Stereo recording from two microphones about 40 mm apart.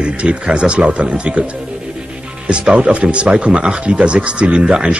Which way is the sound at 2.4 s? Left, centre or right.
Right.